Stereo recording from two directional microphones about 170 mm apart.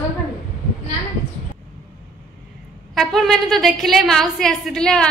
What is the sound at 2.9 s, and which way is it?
A woman's voice, centre (ahead or behind).